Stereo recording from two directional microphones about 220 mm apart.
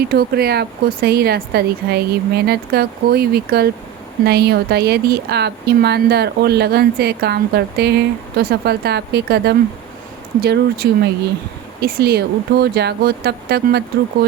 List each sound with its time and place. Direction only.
0.1 s speech: 45° right (ahead or behind)
10.8 s speech: 45° right (ahead or behind)